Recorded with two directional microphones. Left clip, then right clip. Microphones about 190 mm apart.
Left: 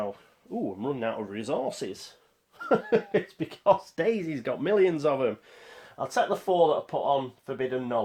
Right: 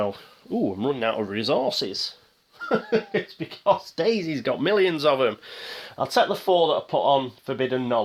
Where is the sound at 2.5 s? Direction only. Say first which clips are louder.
Right 1 dB; 30° left (ahead or behind).